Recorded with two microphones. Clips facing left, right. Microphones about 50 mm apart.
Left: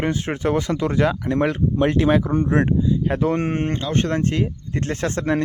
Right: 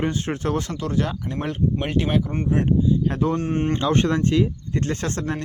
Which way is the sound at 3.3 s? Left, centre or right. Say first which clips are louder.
Left 1 dB; left.